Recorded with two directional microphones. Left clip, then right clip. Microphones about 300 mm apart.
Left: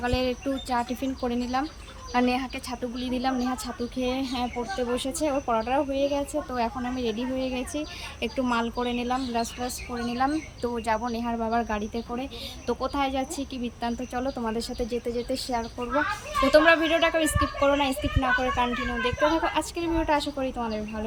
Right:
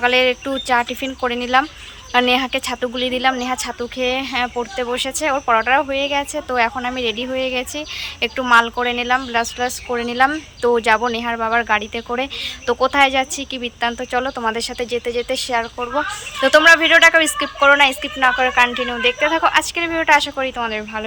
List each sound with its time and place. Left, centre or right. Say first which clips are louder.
0.0 s speech: right 12 dB; centre
5.2 s a woman's voice: right 10 dB; centre
7.5 s speech: right 8 dB; centre
8.6 s a woman's voice: right 9 dB; centre